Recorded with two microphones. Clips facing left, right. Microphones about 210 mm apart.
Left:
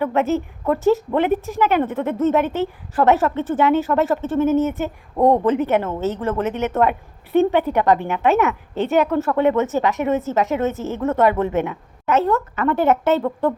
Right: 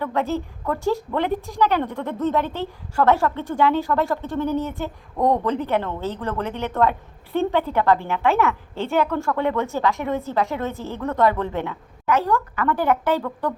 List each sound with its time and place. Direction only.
0.0 s a woman's voice: 20° left (ahead or behind)